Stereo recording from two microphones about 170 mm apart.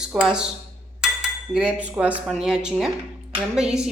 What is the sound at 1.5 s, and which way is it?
Cutlery, 5° right (ahead or behind).